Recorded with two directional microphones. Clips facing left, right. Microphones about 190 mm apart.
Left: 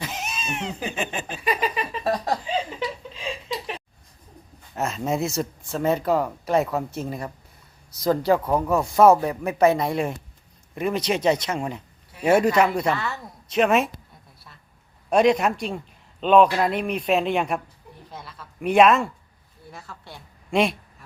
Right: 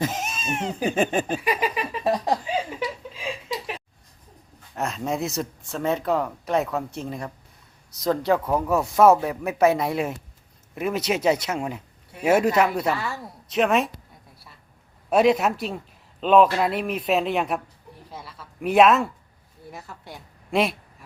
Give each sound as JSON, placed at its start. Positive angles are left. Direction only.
{"t": 0.0, "sound": "a sound", "side_deg": -45}
{"t": 1.4, "sound": "a sound", "side_deg": -10}
{"t": 4.7, "sound": "speech", "side_deg": 0}
{"t": 15.1, "sound": "speech", "side_deg": -5}
{"t": 19.7, "sound": "speech", "side_deg": -15}
{"t": 20.5, "sound": "speech", "side_deg": 0}